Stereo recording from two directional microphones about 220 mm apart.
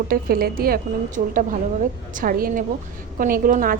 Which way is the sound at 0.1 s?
45° right (ahead or behind).